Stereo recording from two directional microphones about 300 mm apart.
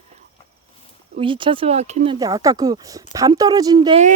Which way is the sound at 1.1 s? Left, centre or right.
Centre.